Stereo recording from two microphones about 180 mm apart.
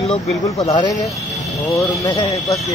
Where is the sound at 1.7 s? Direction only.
20° left (ahead or behind).